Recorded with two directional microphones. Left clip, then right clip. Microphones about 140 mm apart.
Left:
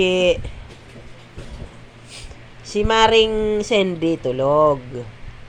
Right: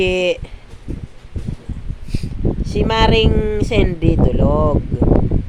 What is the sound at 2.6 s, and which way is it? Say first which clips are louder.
Speech: left 1 dB; 5° right (ahead or behind).